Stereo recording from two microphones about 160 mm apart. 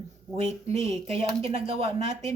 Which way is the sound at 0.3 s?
40° right (ahead or behind).